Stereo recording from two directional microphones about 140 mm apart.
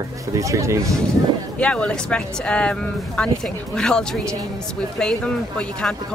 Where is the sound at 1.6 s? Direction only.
10° left (ahead or behind).